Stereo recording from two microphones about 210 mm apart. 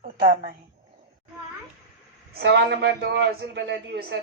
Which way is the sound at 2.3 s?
50° right (ahead or behind).